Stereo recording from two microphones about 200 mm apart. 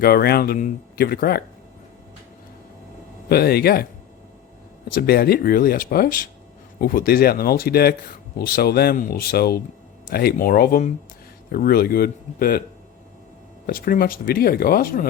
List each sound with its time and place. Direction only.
0.0 s speech: 50° left (ahead or behind)
3.2 s speech: 50° left (ahead or behind)
4.9 s speech: 50° left (ahead or behind)
13.7 s speech: 45° left (ahead or behind)